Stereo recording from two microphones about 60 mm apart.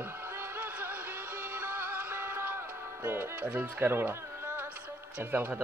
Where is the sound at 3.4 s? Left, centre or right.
Right.